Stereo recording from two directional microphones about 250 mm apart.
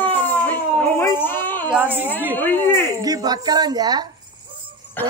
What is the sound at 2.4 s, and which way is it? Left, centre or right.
Speech, centre.